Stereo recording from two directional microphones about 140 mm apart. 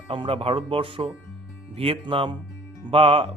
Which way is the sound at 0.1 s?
40° right (ahead or behind).